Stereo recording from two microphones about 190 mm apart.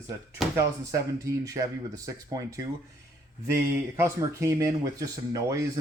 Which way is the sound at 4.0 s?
15° right (ahead or behind).